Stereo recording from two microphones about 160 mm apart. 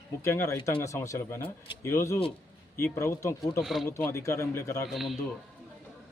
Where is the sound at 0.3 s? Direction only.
15° left (ahead or behind).